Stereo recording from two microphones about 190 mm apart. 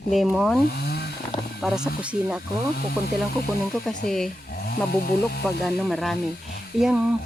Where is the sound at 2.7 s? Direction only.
50° left (ahead or behind).